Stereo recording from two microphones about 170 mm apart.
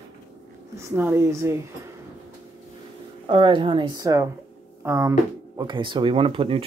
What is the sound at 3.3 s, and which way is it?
Speech, 30° right (ahead or behind).